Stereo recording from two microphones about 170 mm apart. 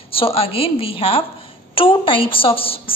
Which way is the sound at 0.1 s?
35° left (ahead or behind).